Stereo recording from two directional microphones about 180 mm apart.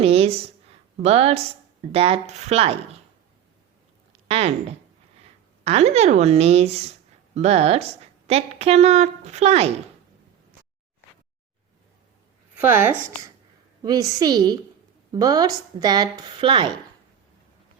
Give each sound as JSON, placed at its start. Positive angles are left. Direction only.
{"t": 0.0, "sound": "a sound", "side_deg": -35}
{"t": 1.0, "sound": "a woman's voice", "side_deg": -35}
{"t": 4.3, "sound": "a woman's voice", "side_deg": -35}
{"t": 12.5, "sound": "speech", "side_deg": -10}
{"t": 13.8, "sound": "a woman's voice", "side_deg": -20}